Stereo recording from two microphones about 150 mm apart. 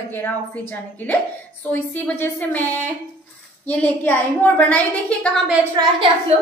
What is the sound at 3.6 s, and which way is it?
A woman's voice, 10° left (ahead or behind).